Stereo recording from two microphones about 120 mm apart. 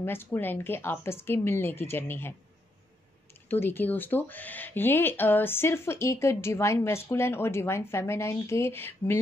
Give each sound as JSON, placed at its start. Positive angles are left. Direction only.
{"t": 0.0, "sound": "speech", "side_deg": 20}
{"t": 3.4, "sound": "speech", "side_deg": 20}